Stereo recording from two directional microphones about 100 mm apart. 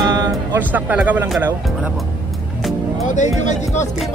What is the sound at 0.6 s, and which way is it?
Music, 20° right (ahead or behind).